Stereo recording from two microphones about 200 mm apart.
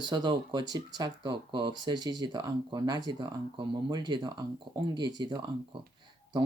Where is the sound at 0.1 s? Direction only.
20° right (ahead or behind).